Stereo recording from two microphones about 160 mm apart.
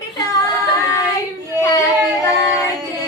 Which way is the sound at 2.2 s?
20° left (ahead or behind).